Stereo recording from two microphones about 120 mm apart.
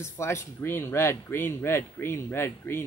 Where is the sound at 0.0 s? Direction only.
20° left (ahead or behind).